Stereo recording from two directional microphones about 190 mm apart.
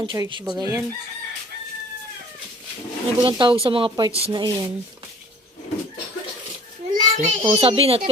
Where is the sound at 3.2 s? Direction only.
25° right (ahead or behind).